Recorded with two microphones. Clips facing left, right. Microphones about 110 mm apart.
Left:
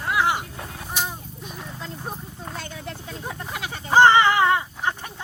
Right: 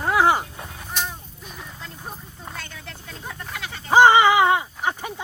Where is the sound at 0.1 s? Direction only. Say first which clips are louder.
Right 4 dB; 40° right (ahead or behind).